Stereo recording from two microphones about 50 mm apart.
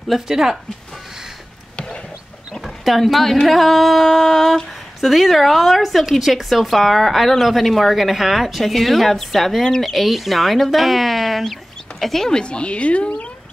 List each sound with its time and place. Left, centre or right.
0.1 s speech: centre
2.6 s speech: centre; by 13.3 s left